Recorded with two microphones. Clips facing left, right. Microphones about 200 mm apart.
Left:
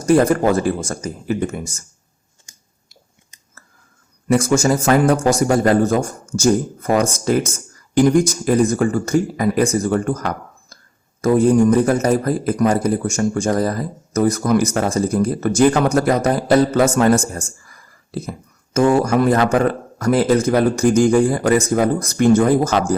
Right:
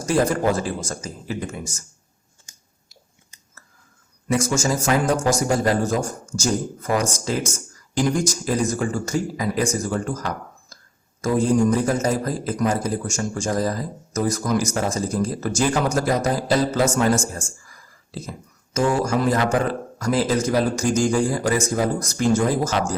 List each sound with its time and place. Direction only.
0.0 s a man's voice: 55° left (ahead or behind)
4.3 s a man's voice: 60° left (ahead or behind)